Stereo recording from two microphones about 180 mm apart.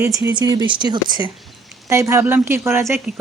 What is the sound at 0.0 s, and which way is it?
Speech, 15° right (ahead or behind).